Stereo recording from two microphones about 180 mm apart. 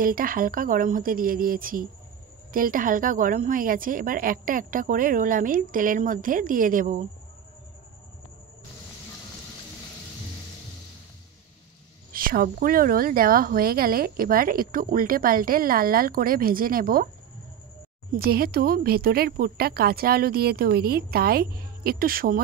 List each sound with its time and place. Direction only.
0.0 s speech: 50° right (ahead or behind)
12.1 s speech: 55° right (ahead or behind)
18.1 s speech: 55° right (ahead or behind)